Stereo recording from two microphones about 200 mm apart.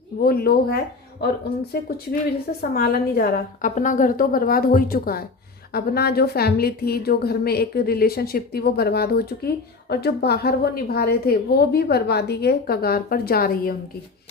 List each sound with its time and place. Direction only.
0.2 s a woman's voice: 50° left (ahead or behind)